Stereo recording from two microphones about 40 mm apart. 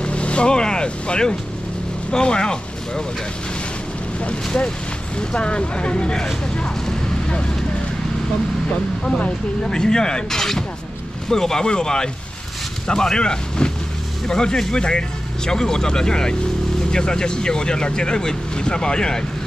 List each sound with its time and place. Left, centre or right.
0.0 s speech: left
4.2 s speech: left
6.5 s a sound: left
9.0 s speech: centre